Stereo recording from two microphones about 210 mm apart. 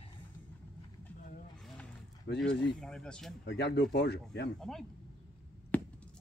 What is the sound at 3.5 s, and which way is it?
Speech, 55° left (ahead or behind).